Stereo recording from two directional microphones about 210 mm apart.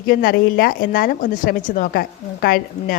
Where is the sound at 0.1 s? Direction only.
45° left (ahead or behind).